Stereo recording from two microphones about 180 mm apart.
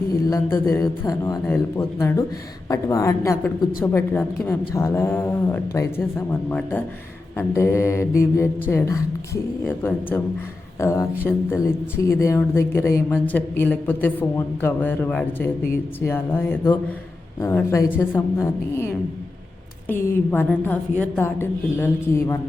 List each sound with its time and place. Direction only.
0.1 s speech: 20° left (ahead or behind)
19.9 s speech: 10° left (ahead or behind)